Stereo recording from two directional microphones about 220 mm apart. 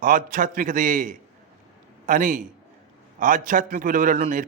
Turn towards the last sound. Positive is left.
turn(degrees=-40)  # may be behind; listen again after turning